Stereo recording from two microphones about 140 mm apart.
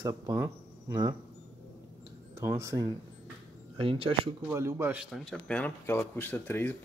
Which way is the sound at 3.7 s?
40° right (ahead or behind).